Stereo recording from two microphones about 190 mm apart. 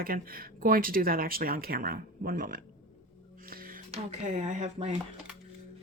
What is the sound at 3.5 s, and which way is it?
Music, 50° right (ahead or behind).